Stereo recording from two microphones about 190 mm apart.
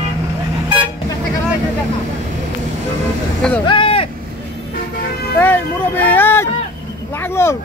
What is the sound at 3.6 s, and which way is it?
Vehicle, 25° left (ahead or behind).